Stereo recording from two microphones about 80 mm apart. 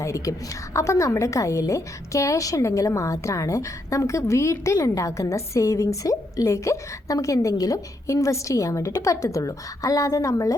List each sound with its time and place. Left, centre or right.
0.0 s a woman's voice: left